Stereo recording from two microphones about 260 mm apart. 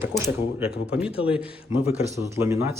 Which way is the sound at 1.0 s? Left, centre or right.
Centre.